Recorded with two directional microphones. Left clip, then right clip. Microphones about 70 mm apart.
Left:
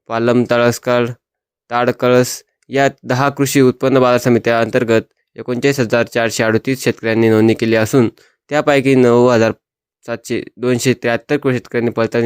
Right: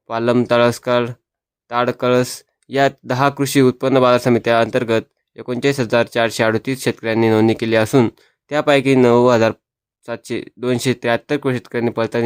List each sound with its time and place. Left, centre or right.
0.1 s speech: left
3.1 s speech: left